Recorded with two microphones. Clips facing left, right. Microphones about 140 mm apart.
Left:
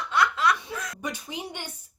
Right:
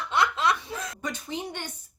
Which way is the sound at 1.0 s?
10° left (ahead or behind).